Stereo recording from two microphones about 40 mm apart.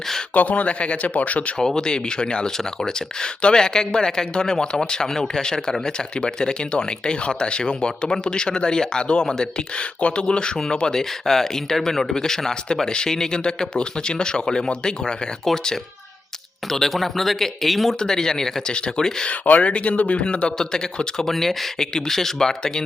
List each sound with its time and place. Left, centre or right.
0.3 s speech: left
1.5 s speech: centre
18.0 s speech: centre
19.3 s speech: left
20.6 s speech: centre